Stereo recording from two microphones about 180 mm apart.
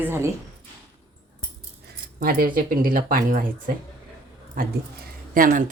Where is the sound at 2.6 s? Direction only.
50° right (ahead or behind).